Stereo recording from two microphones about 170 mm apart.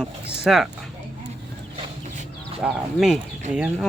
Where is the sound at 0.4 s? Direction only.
Centre (ahead or behind).